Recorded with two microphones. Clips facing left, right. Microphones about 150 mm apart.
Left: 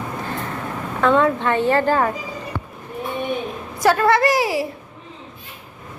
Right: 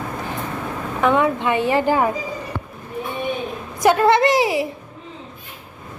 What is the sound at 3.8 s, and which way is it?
Speech, 20° right (ahead or behind).